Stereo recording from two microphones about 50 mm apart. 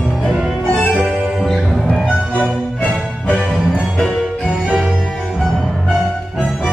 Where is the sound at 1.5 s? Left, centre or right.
Centre.